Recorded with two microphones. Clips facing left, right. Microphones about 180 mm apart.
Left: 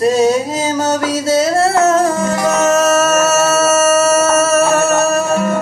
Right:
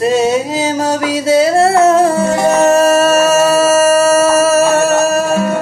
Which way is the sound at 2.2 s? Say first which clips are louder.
Right 3 dB; 30° right (ahead or behind).